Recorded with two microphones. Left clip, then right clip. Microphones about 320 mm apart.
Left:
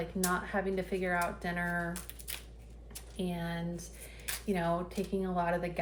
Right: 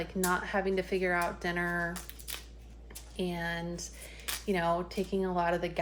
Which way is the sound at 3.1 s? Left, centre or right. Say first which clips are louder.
Right 4 dB; right.